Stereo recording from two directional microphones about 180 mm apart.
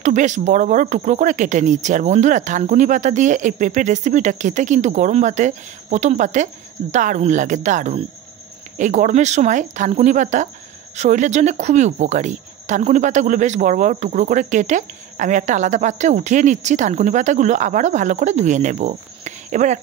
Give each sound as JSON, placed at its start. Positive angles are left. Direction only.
{"t": 0.0, "sound": "speech", "side_deg": -40}